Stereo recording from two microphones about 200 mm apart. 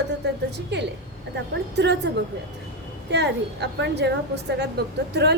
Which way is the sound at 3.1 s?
60° right (ahead or behind).